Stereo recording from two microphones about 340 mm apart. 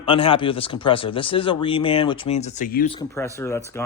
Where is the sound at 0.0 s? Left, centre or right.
Centre.